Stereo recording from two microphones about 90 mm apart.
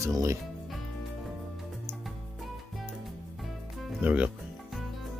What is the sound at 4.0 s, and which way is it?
Speech, 15° right (ahead or behind).